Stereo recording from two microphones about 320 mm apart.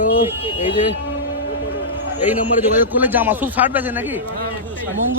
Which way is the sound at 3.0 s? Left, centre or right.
Centre.